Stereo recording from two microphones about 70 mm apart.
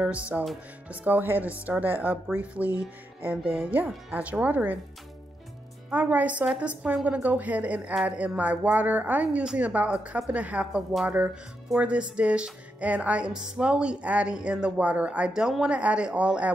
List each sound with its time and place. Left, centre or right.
0.0 s speech: centre
5.9 s speech: right
6.4 s music: centre
7.1 s speech: right
11.8 s music: centre